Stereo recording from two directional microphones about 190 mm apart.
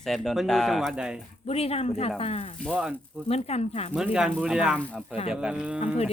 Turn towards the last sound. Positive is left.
turn(degrees=35)  # may be behind; listen again after turning